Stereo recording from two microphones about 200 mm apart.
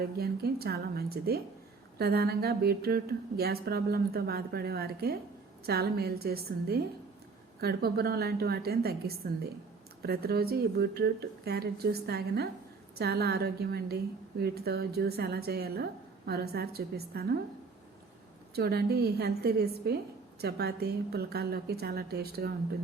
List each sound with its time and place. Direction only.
0.0 s a woman's voice: 50° right (ahead or behind)
18.5 s a woman's voice: 50° right (ahead or behind)